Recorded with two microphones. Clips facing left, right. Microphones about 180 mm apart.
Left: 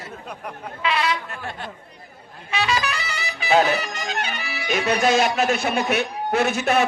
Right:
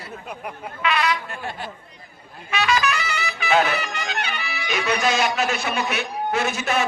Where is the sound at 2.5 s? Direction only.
30° left (ahead or behind); by 4.8 s 45° left (ahead or behind).